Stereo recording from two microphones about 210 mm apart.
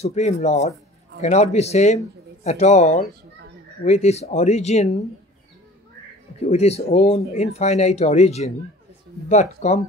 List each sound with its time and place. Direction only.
0.0 s speech: 30° left (ahead or behind)
6.4 s speech: 30° left (ahead or behind)